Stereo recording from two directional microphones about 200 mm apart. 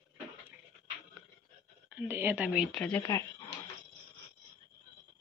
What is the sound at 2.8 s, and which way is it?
Speech, 10° left (ahead or behind).